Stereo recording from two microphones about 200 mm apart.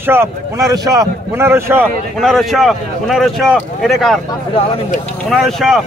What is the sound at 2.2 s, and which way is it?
Speech, centre (ahead or behind).